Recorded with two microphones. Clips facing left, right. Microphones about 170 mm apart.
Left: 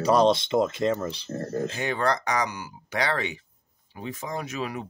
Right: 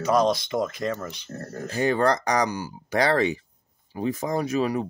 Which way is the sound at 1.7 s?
40° right (ahead or behind).